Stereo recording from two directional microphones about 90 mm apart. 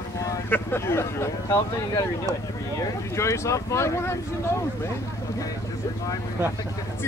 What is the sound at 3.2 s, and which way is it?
Speech, 35° left (ahead or behind).